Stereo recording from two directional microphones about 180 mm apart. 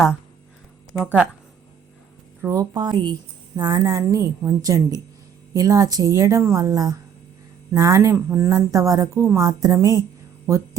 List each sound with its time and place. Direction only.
0.9 s speech: 5° left (ahead or behind)
2.4 s a woman's voice: 20° right (ahead or behind)